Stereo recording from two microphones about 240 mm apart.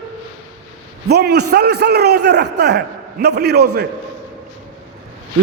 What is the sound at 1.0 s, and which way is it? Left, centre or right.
A man's voice, right.